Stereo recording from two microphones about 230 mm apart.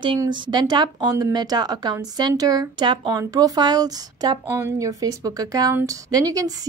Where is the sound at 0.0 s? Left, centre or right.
Right.